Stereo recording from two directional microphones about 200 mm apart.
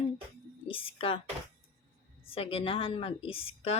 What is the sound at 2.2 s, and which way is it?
A woman's voice, 30° left (ahead or behind).